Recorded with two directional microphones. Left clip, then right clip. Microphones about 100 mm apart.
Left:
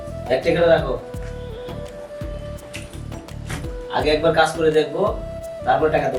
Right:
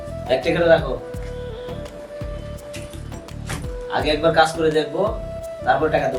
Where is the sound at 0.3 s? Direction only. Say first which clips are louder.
Even; 5° right (ahead or behind).